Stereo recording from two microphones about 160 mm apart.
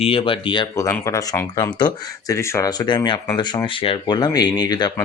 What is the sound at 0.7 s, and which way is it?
Speech, 20° left (ahead or behind).